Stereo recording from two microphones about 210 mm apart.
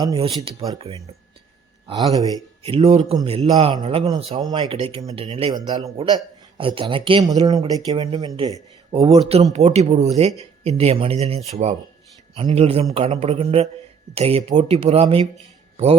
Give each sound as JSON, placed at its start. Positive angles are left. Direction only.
{"t": 0.0, "sound": "speech", "side_deg": -20}